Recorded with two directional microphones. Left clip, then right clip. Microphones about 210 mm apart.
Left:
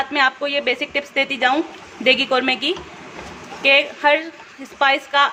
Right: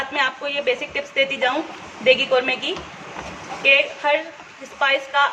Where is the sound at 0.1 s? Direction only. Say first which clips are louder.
Left 4 dB; 45° left (ahead or behind).